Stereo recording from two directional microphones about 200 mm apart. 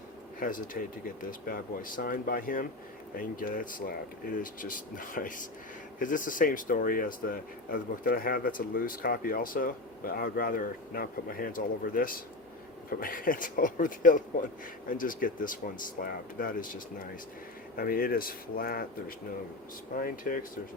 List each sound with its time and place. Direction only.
0.3 s speech: 45° left (ahead or behind)